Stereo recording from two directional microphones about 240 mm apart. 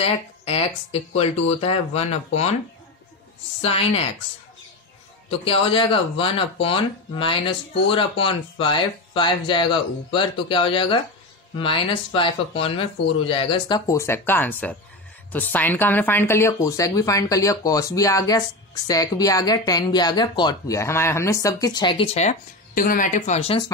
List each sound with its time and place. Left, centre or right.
0.0 s speech: left
3.6 s speech: left
5.3 s speech: left